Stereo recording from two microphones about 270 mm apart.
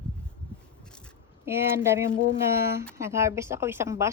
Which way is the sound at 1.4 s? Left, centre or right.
Centre.